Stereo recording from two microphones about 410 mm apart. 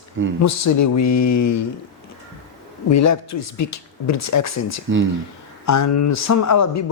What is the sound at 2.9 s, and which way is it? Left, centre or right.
A man's voice, left.